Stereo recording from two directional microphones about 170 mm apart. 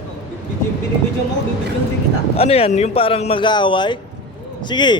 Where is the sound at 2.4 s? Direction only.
35° left (ahead or behind).